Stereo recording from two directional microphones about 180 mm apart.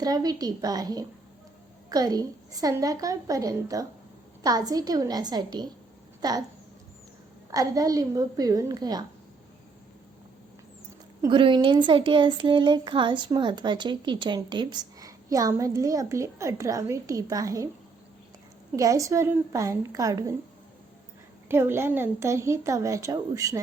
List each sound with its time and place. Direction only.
0.0 s a woman's voice: 20° right (ahead or behind)
7.5 s a woman's voice: 20° right (ahead or behind)
11.2 s a woman's voice: 25° right (ahead or behind)
18.8 s a woman's voice: 20° right (ahead or behind)
21.5 s a woman's voice: 15° right (ahead or behind)